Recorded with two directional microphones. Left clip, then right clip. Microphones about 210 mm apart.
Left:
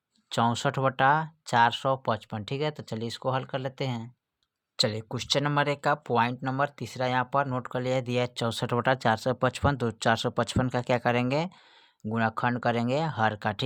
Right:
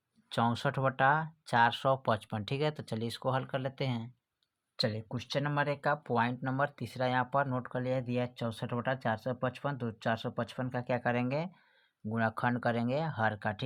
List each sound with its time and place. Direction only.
0.3 s speech: 20° left (ahead or behind)
4.8 s speech: 35° left (ahead or behind)